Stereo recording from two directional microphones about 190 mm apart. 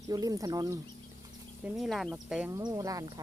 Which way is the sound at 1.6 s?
Centre (ahead or behind).